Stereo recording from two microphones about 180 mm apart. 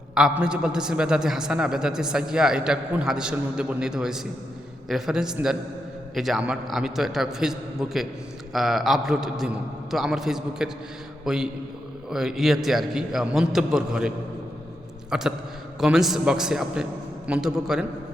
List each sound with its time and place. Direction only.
0.1 s a man's voice: 5° right (ahead or behind)
15.1 s a man's voice: 5° right (ahead or behind)